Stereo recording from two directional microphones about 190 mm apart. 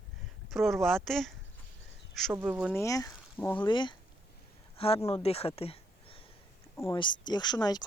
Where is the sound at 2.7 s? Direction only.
15° left (ahead or behind).